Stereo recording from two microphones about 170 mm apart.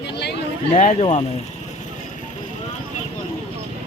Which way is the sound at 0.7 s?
40° left (ahead or behind).